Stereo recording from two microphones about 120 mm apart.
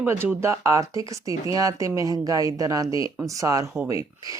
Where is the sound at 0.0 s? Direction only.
20° right (ahead or behind).